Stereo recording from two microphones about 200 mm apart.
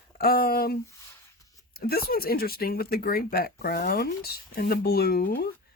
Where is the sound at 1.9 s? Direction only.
50° left (ahead or behind).